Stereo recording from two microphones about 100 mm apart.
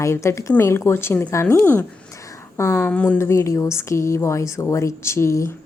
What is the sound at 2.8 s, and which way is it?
Speech, 15° left (ahead or behind).